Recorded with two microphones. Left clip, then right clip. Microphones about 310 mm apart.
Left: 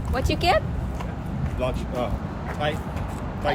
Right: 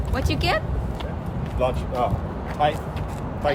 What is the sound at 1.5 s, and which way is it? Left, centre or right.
Speech, right.